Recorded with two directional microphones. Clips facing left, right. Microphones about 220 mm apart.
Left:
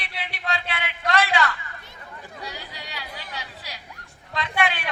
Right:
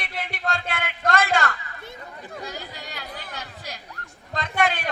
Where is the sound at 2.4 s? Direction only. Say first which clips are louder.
Right 2 dB; 45° right (ahead or behind).